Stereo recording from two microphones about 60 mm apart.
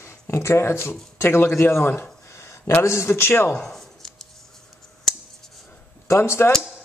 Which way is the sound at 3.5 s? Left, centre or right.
Centre.